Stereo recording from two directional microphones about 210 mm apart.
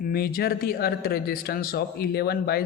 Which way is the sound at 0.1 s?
45° left (ahead or behind).